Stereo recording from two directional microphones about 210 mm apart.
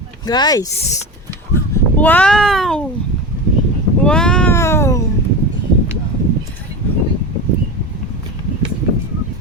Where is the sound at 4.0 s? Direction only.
5° left (ahead or behind).